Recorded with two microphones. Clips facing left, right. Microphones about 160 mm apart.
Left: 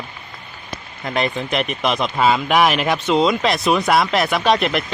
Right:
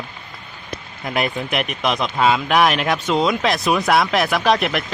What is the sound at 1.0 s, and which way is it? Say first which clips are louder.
Speech: left 1 dB; centre (ahead or behind).